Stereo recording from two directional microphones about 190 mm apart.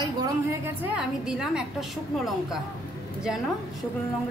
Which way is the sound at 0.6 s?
10° right (ahead or behind).